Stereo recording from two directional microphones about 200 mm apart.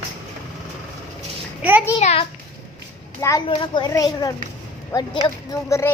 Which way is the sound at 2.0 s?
35° left (ahead or behind).